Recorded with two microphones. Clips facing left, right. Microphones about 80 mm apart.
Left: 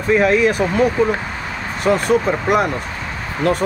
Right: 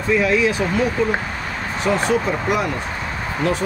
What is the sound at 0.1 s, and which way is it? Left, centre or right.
Speech, left.